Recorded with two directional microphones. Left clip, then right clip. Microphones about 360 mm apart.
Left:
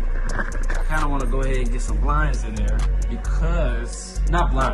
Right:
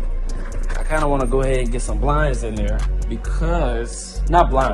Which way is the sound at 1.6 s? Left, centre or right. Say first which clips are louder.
Right 6 dB; centre.